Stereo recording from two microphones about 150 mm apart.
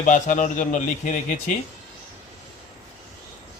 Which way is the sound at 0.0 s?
55° left (ahead or behind).